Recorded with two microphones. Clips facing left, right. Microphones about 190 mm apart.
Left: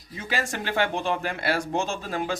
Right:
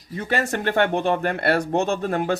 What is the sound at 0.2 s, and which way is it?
Speech, 60° right (ahead or behind).